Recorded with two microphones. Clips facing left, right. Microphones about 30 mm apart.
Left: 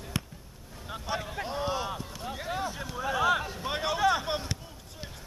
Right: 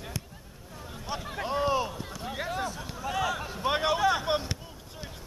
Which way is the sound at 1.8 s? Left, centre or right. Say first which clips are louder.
Even; centre.